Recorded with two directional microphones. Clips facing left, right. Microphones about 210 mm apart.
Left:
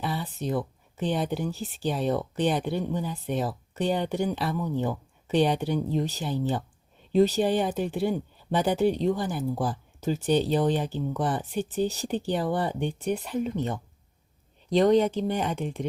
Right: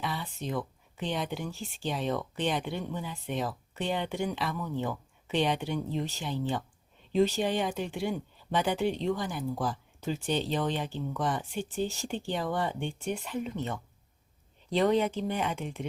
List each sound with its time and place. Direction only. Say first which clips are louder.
0.0 s speech: left 5 dB; 40° left (ahead or behind)
14.9 s speech: left 5 dB; 35° left (ahead or behind)